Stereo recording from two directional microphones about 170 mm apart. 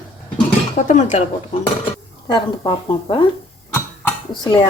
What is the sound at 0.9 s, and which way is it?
Speech, 45° left (ahead or behind).